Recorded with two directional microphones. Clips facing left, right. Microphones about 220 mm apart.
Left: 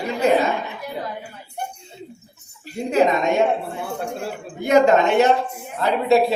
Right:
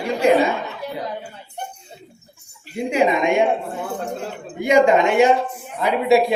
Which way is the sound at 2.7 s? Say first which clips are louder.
Even; 10° right (ahead or behind).